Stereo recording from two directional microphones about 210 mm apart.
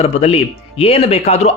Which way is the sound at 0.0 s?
30° left (ahead or behind).